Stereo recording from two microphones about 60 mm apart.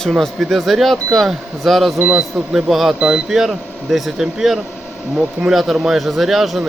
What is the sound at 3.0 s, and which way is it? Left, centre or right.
Speech, centre.